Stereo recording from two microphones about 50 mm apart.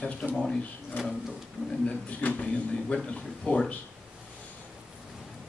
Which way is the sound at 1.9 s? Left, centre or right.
Left.